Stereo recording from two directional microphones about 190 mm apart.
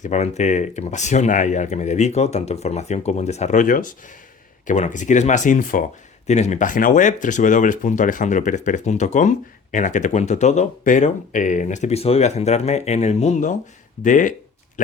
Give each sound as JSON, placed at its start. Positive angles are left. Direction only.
{"t": 0.0, "sound": "speech", "side_deg": 40}